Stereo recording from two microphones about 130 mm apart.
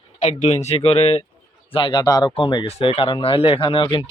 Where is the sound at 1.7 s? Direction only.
40° left (ahead or behind).